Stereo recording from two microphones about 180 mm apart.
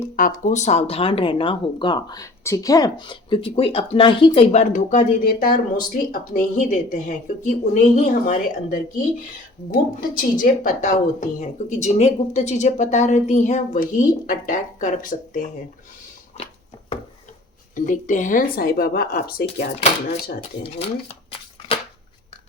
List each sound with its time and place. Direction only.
0.2 s speech: 45° left (ahead or behind)
10.0 s speech: 50° left (ahead or behind)
17.7 s speech: 45° left (ahead or behind)
20.7 s a sound: 30° left (ahead or behind)